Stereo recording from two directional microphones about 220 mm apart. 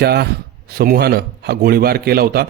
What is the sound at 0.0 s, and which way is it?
Speech, 50° right (ahead or behind).